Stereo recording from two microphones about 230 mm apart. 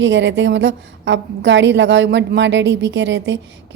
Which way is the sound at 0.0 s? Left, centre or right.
Right.